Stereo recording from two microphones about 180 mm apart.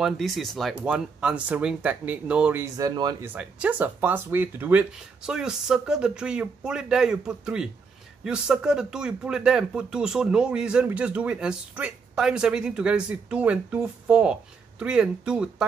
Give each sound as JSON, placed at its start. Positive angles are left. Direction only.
{"t": 0.0, "sound": "speech", "side_deg": 0}
{"t": 3.3, "sound": "speech", "side_deg": -5}